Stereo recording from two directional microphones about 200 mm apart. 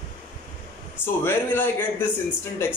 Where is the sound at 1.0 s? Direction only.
10° left (ahead or behind).